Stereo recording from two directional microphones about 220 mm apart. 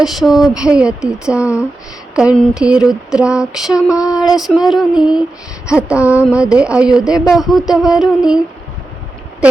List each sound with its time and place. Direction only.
0.0 s speech: centre (ahead or behind)
3.9 s speech: 15° left (ahead or behind)
4.4 s speech: centre (ahead or behind)